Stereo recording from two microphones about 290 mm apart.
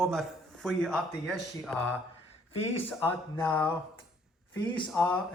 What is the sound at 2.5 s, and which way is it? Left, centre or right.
Speech, centre.